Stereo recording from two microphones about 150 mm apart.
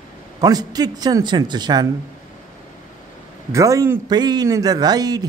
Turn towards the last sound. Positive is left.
turn(degrees=-25)  # may be behind; listen again after turning